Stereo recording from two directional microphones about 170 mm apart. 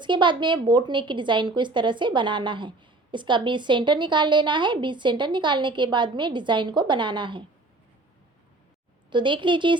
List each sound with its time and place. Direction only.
0.0 s a woman's voice: 25° right (ahead or behind)
9.0 s a woman's voice: 30° right (ahead or behind)